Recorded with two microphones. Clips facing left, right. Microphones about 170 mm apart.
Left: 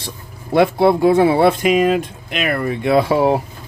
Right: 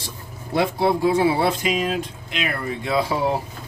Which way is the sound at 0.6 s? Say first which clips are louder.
Left 7 dB; 60° left (ahead or behind).